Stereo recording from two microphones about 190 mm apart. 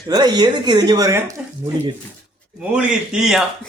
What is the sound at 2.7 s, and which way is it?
Speech, 5° right (ahead or behind).